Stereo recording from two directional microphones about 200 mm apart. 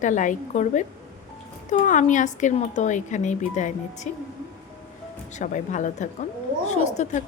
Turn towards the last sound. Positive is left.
turn(degrees=35)  # may be behind; listen again after turning